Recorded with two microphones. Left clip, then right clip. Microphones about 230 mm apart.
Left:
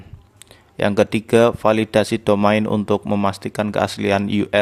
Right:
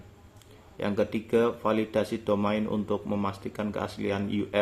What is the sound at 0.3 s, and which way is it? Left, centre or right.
Speech, left.